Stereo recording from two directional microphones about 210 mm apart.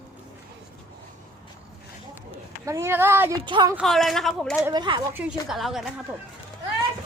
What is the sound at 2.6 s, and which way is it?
Speech, 15° right (ahead or behind).